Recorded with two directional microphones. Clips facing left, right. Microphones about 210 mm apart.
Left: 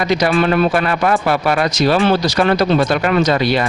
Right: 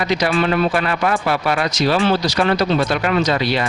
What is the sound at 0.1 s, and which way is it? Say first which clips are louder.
Speech: left 4 dB; 45° left (ahead or behind).